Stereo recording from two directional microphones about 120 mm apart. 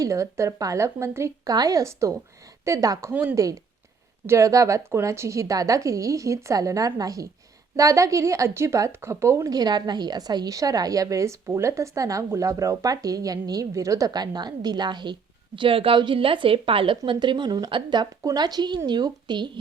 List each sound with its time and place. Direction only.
0.0 s a woman's voice: 25° right (ahead or behind)